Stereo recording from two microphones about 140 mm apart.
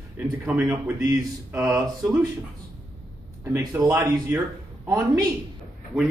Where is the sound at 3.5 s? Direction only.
20° right (ahead or behind).